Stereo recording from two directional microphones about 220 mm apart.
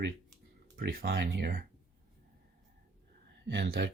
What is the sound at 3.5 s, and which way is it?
Speech, 55° right (ahead or behind).